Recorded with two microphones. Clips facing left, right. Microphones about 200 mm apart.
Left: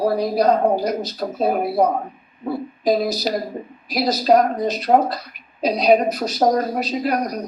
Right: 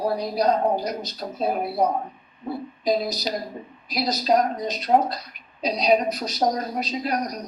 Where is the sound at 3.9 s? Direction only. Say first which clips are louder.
Left 5 dB; 55° left (ahead or behind).